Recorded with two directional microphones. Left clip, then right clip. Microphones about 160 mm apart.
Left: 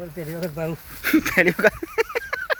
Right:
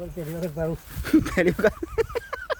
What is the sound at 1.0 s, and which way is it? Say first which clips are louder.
Speech: left 3 dB; 15° right (ahead or behind).